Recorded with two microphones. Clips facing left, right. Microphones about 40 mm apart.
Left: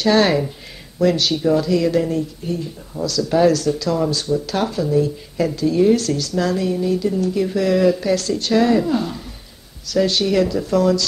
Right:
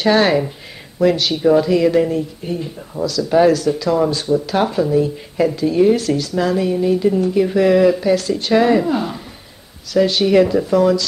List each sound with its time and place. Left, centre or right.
0.1 s speech: centre
10.3 s speech: right
10.6 s speech: centre